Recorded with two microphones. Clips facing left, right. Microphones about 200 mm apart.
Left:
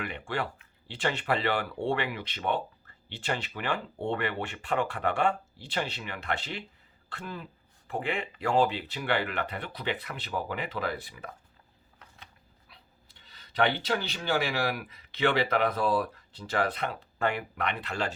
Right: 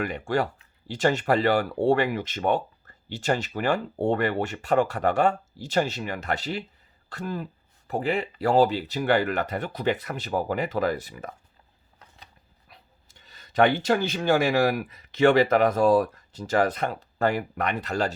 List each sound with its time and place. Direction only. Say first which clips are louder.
0.0 s speech: right 8 dB; 40° right (ahead or behind)